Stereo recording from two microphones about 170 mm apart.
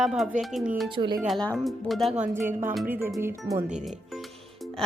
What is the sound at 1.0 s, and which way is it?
Speech, 25° right (ahead or behind).